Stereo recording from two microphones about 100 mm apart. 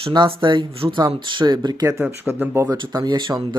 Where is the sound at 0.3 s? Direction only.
55° right (ahead or behind).